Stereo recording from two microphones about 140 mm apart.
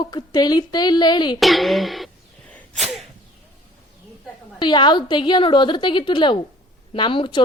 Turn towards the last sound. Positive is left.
turn(degrees=35)  # may be behind; listen again after turning